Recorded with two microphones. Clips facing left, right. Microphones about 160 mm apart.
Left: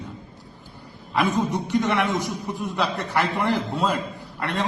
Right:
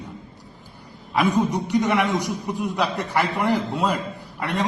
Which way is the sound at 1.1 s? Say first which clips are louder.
Right 2 dB; 10° right (ahead or behind).